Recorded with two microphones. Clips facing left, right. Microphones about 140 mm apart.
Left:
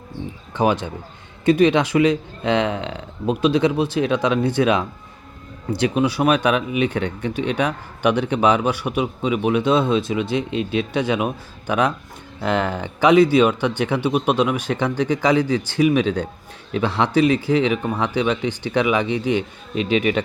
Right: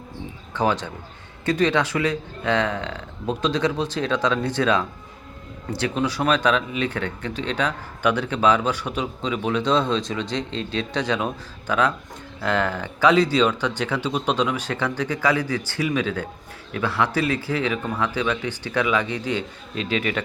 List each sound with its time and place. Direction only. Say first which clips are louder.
0.5 s speech: left 3 dB; 15° left (ahead or behind)